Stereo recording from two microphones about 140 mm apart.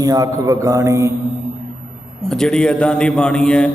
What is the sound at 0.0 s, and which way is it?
A man's voice, 25° right (ahead or behind).